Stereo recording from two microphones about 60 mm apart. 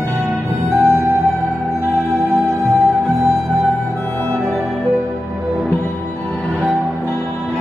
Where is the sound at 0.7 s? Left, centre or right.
Right.